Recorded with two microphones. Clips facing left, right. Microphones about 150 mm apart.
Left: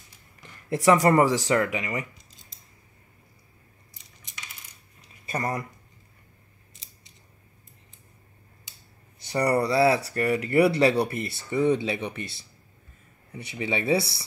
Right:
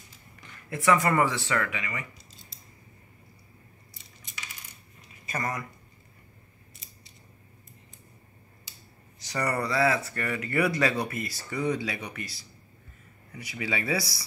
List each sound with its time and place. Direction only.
0.7 s speech: 35° left (ahead or behind)
5.3 s speech: 35° left (ahead or behind)
9.3 s speech: 35° left (ahead or behind)